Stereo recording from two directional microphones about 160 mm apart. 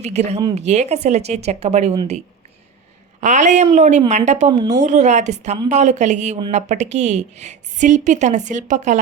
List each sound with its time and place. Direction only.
0.0 s a woman's voice: 45° right (ahead or behind)
3.2 s a woman's voice: 50° right (ahead or behind)